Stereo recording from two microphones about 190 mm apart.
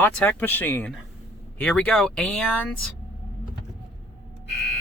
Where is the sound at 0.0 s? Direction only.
10° left (ahead or behind).